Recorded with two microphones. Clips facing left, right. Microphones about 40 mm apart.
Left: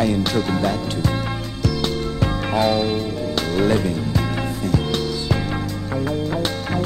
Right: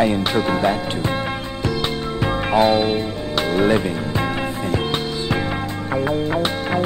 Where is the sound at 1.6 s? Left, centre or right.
Right.